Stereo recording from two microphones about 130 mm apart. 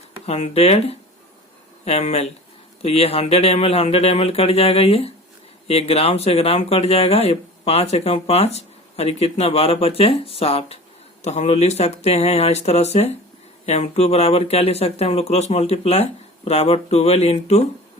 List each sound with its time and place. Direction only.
0.3 s speech: 55° left (ahead or behind)
11.2 s speech: 60° left (ahead or behind)